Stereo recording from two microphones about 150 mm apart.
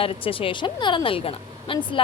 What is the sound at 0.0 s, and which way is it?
A woman's voice, 35° left (ahead or behind).